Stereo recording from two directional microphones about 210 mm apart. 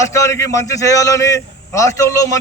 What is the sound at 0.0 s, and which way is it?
A man's voice, 15° left (ahead or behind).